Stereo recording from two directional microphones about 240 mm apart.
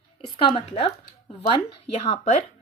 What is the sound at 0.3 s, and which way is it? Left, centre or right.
Speech, left.